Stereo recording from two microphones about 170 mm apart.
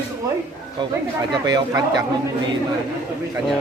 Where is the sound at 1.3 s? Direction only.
25° right (ahead or behind).